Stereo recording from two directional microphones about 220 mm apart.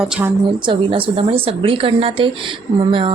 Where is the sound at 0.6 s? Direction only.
20° right (ahead or behind).